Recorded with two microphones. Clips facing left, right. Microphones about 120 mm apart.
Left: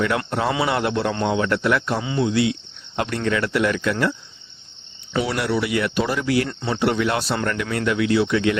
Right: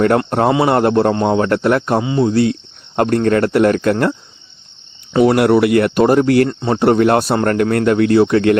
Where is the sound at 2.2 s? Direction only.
45° right (ahead or behind).